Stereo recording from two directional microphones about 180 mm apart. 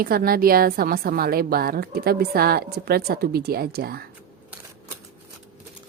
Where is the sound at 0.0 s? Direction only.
55° right (ahead or behind).